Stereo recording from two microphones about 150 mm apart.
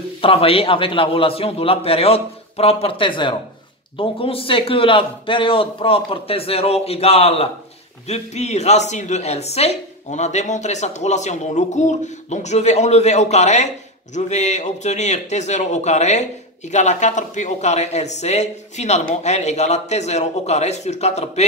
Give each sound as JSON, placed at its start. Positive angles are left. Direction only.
{"t": 0.2, "sound": "a man's voice", "side_deg": 40}